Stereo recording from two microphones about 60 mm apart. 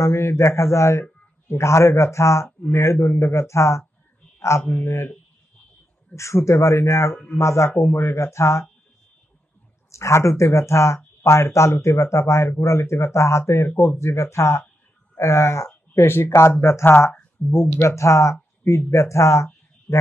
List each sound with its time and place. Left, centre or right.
0.0 s speech: left
2.4 s speech: left
2.8 s speech: left
6.1 s speech: left
9.8 s speech: left
18.3 s a sound: left
18.9 s speech: left